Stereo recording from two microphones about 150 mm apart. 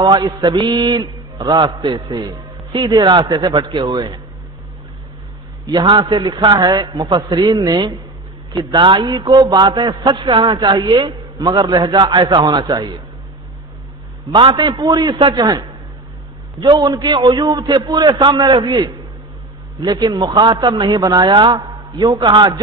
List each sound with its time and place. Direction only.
0.0 s a man's voice: 25° right (ahead or behind)
5.7 s a man's voice: 30° right (ahead or behind)
14.3 s a man's voice: 35° right (ahead or behind)